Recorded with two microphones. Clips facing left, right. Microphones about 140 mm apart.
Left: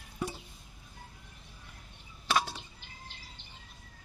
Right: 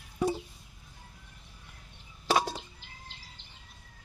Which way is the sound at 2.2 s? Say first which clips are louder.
Right 3 dB; 35° right (ahead or behind).